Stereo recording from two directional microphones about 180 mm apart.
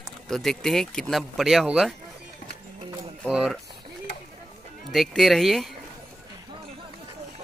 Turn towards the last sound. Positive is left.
turn(degrees=0)  # may be behind; listen again after turning